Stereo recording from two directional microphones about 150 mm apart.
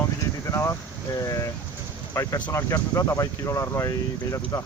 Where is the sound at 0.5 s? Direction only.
20° left (ahead or behind).